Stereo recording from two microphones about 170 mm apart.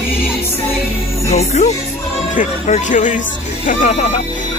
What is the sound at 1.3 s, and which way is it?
Speech, 40° left (ahead or behind).